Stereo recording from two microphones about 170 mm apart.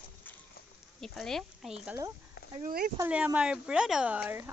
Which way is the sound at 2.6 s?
55° right (ahead or behind).